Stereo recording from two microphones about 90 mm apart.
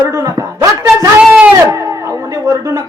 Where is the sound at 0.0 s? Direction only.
35° right (ahead or behind).